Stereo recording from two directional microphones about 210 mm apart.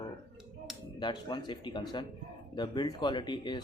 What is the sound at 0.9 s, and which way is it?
Speech, 20° left (ahead or behind).